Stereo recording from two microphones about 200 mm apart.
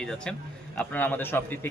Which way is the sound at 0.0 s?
5° left (ahead or behind).